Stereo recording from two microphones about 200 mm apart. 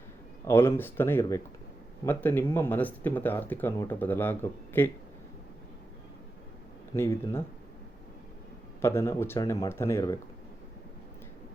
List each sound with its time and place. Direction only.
0.4 s speech: 10° left (ahead or behind)
6.9 s speech: 15° left (ahead or behind)
8.8 s speech: 15° left (ahead or behind)